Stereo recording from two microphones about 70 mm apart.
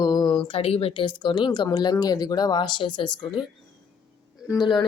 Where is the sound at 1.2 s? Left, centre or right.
Left.